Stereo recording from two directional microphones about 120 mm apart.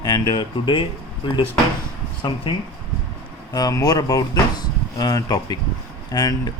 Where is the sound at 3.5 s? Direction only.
30° left (ahead or behind).